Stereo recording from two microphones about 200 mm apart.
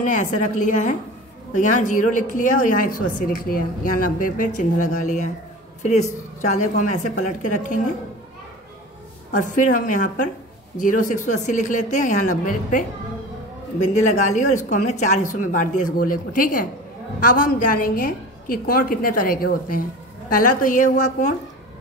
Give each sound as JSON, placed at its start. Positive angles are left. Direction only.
{"t": 0.0, "sound": "a woman's voice", "side_deg": 40}
{"t": 9.3, "sound": "a woman's voice", "side_deg": 40}